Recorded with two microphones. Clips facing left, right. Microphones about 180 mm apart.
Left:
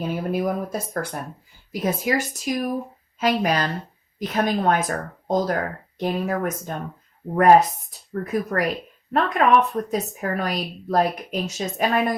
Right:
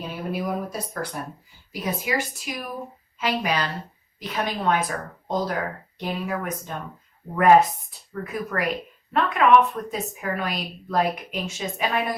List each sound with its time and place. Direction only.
0.1 s a woman's voice: 45° left (ahead or behind)